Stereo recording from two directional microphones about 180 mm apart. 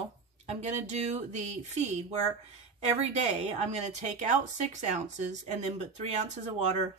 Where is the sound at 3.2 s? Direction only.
40° right (ahead or behind).